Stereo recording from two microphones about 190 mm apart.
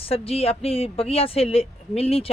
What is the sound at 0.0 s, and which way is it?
Speech, 30° left (ahead or behind).